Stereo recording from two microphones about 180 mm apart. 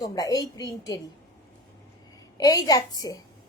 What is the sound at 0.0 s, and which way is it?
Speech, 20° left (ahead or behind).